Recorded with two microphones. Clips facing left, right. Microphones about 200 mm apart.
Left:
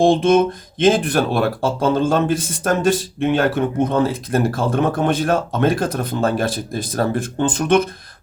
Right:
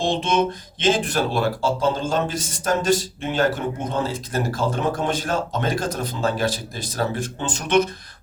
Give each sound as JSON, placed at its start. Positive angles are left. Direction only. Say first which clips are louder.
{"t": 0.0, "sound": "speech", "louder": "left 8 dB", "side_deg": 55}